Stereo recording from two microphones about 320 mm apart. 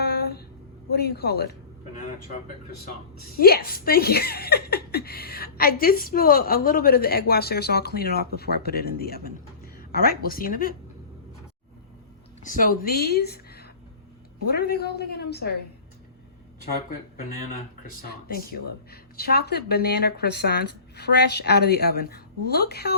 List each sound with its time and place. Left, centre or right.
0.0 s a sound: left
0.9 s speech: left
3.3 s speech: left
12.4 s speech: left
17.8 s speech: left